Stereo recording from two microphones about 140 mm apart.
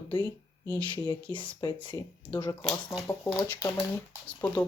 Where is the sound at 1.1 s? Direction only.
35° left (ahead or behind).